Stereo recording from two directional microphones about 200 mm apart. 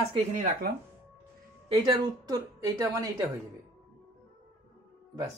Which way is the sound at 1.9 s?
20° right (ahead or behind).